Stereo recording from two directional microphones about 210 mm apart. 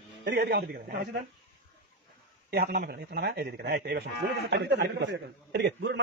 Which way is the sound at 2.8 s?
50° right (ahead or behind).